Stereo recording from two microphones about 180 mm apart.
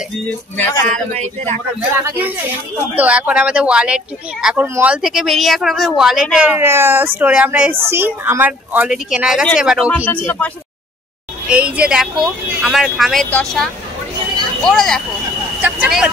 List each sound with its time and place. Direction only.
0.8 s a man's voice: 40° right (ahead or behind)
2.0 s speech: 15° right (ahead or behind)
9.8 s speech: 10° left (ahead or behind)
11.4 s speech: 5° right (ahead or behind)